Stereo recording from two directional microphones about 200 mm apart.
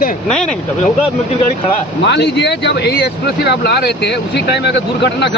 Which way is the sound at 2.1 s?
60° left (ahead or behind).